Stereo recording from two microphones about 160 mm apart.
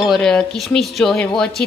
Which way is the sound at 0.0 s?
Centre (ahead or behind).